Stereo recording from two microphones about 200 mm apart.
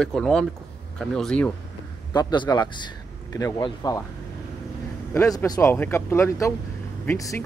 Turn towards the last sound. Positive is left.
turn(degrees=15)  # may be behind; listen again after turning